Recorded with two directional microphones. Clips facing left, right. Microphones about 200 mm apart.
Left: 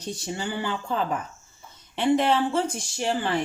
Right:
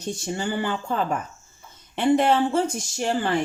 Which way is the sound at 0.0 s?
50° right (ahead or behind).